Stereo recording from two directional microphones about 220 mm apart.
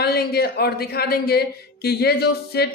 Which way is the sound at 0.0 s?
45° left (ahead or behind).